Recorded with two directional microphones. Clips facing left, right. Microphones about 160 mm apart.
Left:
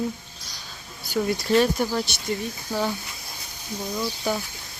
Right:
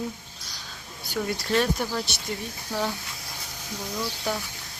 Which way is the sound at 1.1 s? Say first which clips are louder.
Left 4 dB; 5° left (ahead or behind).